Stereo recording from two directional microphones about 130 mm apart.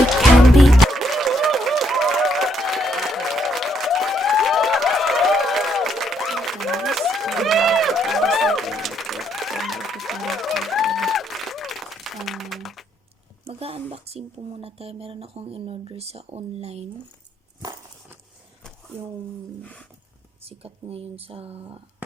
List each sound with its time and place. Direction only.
0.1 s music: centre (ahead or behind)
13.5 s a sound: 50° right (ahead or behind)
20.4 s speech: 50° right (ahead or behind)